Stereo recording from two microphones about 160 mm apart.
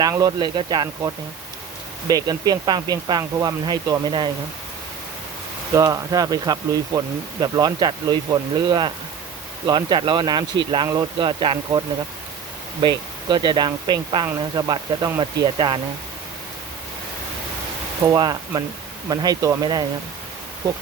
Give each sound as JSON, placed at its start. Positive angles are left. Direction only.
{"t": 0.0, "sound": "speech", "side_deg": -25}
{"t": 5.7, "sound": "speech", "side_deg": -20}
{"t": 12.8, "sound": "speech", "side_deg": -25}
{"t": 18.0, "sound": "speech", "side_deg": -25}